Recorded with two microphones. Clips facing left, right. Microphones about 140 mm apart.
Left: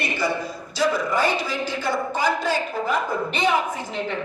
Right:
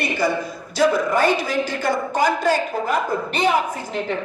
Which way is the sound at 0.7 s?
50° right (ahead or behind).